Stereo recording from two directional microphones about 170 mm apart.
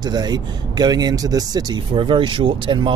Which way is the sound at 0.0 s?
25° right (ahead or behind).